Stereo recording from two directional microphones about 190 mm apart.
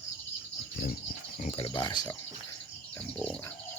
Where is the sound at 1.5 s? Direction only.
25° left (ahead or behind).